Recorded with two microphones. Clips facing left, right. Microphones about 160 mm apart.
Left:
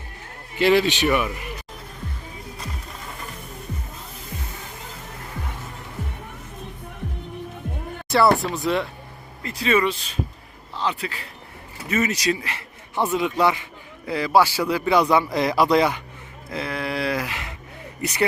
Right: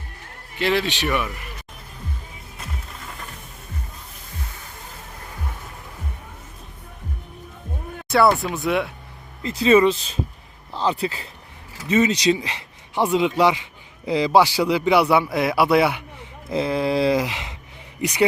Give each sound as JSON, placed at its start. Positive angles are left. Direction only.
{"t": 0.6, "sound": "a man's voice", "side_deg": 0}
{"t": 8.5, "sound": "a man's voice", "side_deg": 0}
{"t": 9.4, "sound": "a sound", "side_deg": -25}
{"t": 10.8, "sound": "speech", "side_deg": -35}
{"t": 11.9, "sound": "speech", "side_deg": -20}
{"t": 16.5, "sound": "a sound", "side_deg": -25}
{"t": 18.0, "sound": "speech", "side_deg": -15}